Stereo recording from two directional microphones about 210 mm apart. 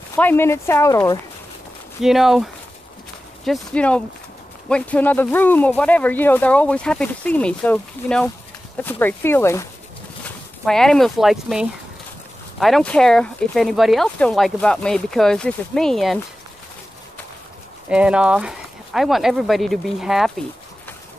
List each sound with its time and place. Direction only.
0.1 s speech: 10° left (ahead or behind)
2.0 s speech: centre (ahead or behind)
17.8 s speech: 5° right (ahead or behind)